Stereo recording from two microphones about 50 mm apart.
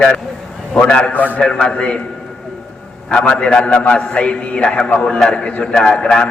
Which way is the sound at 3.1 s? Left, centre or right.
Centre.